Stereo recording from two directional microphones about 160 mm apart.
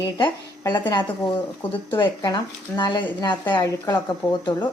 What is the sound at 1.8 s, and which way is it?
Speech, 30° left (ahead or behind).